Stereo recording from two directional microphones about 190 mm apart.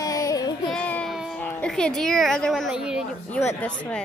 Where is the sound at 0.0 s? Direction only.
20° left (ahead or behind).